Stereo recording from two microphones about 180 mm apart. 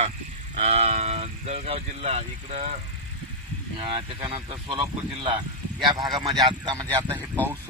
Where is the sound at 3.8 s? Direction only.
30° right (ahead or behind).